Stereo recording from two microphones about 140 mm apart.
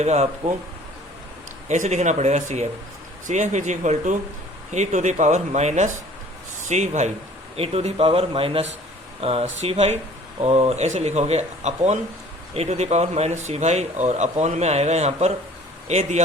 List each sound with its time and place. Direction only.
0.0 s speech: 50° right (ahead or behind)
1.6 s speech: 55° right (ahead or behind)
7.5 s speech: 45° right (ahead or behind)